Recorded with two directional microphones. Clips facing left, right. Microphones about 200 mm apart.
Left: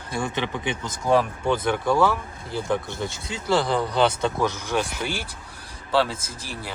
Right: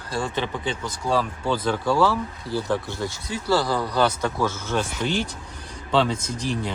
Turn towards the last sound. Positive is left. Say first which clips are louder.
# right 9 dB
turn(degrees=5)  # may be behind; listen again after turning